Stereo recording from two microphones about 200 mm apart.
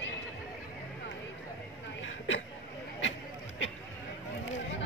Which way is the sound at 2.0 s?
75° left (ahead or behind).